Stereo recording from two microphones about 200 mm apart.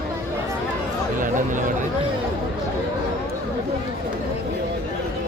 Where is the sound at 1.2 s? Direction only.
40° right (ahead or behind).